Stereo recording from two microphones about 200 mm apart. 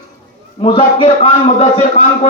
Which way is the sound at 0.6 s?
25° left (ahead or behind).